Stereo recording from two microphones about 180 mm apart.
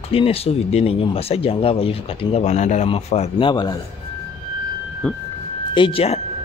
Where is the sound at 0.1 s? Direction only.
30° left (ahead or behind).